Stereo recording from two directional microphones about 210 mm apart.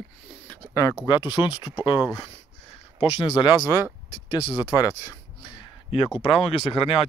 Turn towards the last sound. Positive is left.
turn(degrees=25)  # may be behind; listen again after turning